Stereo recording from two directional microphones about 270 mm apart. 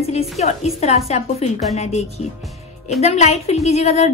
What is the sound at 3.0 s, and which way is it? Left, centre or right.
A woman's voice, left.